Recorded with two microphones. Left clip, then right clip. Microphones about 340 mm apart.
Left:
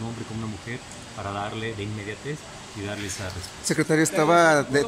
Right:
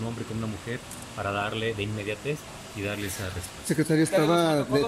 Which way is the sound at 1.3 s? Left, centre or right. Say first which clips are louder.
Right 2 dB; centre.